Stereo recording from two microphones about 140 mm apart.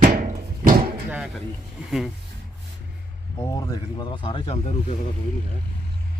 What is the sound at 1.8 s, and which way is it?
Speech, centre (ahead or behind).